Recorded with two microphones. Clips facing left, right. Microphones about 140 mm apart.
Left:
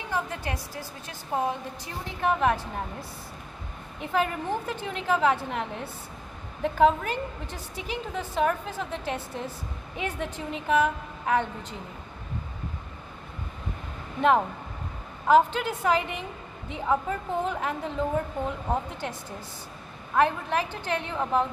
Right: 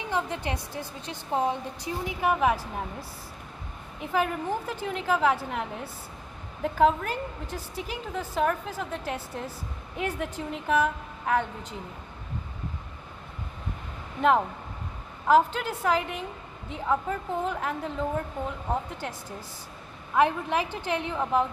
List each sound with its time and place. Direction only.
0.1 s a woman's voice: 20° right (ahead or behind)
2.0 s a woman's voice: 5° right (ahead or behind)
15.2 s a woman's voice: centre (ahead or behind)
20.2 s a woman's voice: 10° right (ahead or behind)